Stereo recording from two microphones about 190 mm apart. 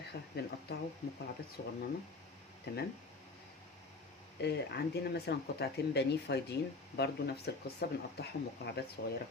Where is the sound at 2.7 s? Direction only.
60° left (ahead or behind).